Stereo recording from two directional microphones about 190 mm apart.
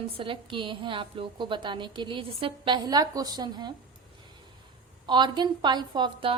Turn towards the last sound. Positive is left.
turn(degrees=-25)  # may be behind; listen again after turning